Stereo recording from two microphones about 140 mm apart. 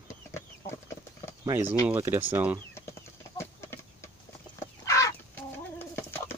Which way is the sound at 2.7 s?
20° left (ahead or behind).